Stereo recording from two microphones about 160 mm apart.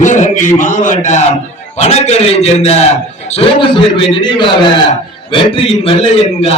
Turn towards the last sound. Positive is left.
turn(degrees=35)  # may be behind; listen again after turning